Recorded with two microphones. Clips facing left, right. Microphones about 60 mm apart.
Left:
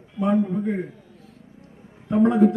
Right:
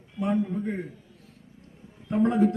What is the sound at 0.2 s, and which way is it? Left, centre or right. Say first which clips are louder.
Speech: left 5 dB; left.